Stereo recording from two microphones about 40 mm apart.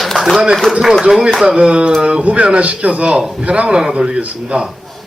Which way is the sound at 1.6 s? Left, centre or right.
Right.